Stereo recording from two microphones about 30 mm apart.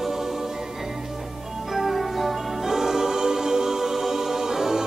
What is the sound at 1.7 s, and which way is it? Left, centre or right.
Music, centre.